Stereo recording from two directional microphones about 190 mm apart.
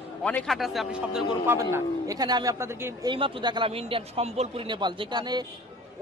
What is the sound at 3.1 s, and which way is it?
A man's voice, 25° right (ahead or behind).